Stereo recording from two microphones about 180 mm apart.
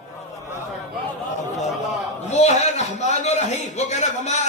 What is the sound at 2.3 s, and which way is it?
Speech, 40° left (ahead or behind).